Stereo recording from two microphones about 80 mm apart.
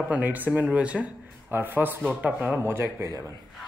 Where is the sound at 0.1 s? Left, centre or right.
Right.